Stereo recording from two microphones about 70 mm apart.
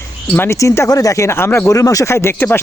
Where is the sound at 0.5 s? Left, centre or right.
Left.